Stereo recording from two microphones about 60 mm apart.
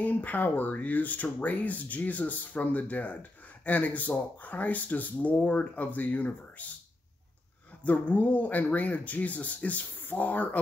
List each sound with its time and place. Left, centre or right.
0.0 s speech: left
7.8 s speech: left